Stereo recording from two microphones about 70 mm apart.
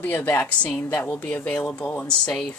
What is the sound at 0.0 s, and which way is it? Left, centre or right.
Speech, left.